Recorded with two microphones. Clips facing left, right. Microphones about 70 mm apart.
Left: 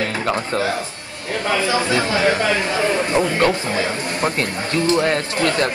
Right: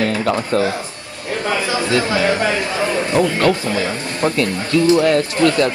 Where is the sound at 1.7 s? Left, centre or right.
Left.